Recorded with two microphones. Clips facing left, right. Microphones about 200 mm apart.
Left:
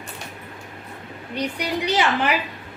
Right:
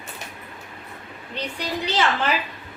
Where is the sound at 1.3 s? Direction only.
15° left (ahead or behind).